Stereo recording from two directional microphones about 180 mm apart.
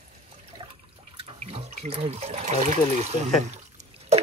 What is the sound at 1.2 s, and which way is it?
Speech, 35° right (ahead or behind).